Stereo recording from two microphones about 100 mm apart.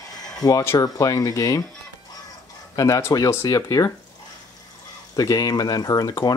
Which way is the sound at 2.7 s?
35° left (ahead or behind).